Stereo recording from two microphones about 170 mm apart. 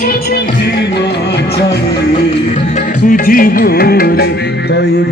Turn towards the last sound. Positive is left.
turn(degrees=70)  # may be behind; listen again after turning